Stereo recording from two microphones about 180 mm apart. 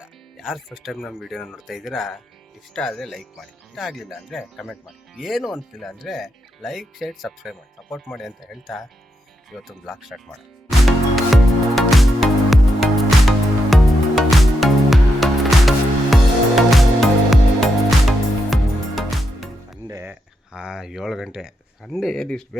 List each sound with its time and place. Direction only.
0.0 s speech: centre (ahead or behind)
10.7 s music: centre (ahead or behind)
19.9 s a sound: 15° right (ahead or behind)
20.5 s speech: 5° right (ahead or behind)